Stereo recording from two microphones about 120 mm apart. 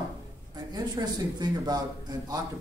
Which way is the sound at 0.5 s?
35° right (ahead or behind).